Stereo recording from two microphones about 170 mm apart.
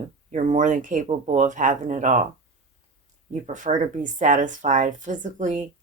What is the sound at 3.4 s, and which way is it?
Speech, 45° right (ahead or behind).